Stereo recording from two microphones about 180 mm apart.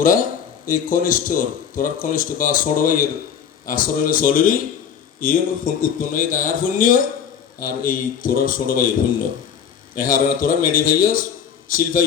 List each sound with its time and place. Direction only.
0.6 s speech: 50° left (ahead or behind)